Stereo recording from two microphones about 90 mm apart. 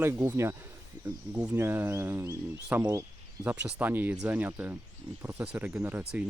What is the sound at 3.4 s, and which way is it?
Speech, 20° right (ahead or behind).